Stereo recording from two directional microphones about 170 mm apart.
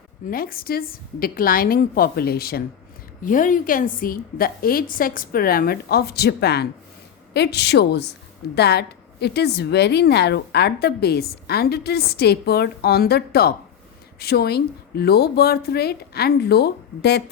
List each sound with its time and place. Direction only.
0.3 s a woman's voice: 60° left (ahead or behind)
3.2 s a woman's voice: 50° left (ahead or behind); by 17.2 s 75° left (ahead or behind)